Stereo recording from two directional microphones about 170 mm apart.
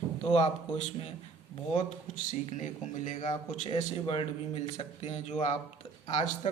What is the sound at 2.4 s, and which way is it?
Speech, 45° left (ahead or behind).